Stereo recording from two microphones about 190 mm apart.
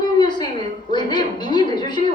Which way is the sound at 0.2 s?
25° left (ahead or behind).